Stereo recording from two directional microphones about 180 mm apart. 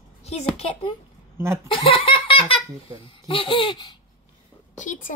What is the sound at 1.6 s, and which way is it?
Giggle, 30° left (ahead or behind).